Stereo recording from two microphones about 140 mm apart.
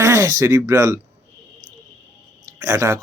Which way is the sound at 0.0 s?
20° right (ahead or behind).